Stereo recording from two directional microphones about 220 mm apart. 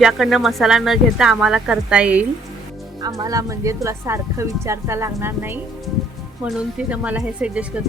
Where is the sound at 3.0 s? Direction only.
15° right (ahead or behind).